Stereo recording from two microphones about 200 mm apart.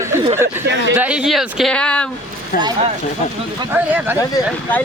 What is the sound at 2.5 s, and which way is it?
Speech, 45° left (ahead or behind).